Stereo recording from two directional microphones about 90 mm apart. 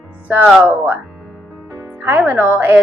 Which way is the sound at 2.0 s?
20° right (ahead or behind).